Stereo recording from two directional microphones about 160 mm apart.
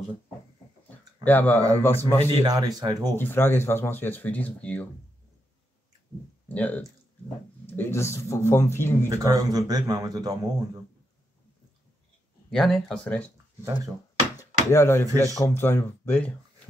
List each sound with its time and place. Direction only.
0.8 s a sound: 10° left (ahead or behind)
1.8 s speech: 15° left (ahead or behind)
2.4 s speech: 25° right (ahead or behind)
3.2 s speech: 15° left (ahead or behind)
6.5 s speech: 10° left (ahead or behind)
9.1 s speech: 20° right (ahead or behind)
12.4 s speech: 5° left (ahead or behind)
14.7 s speech: 15° left (ahead or behind)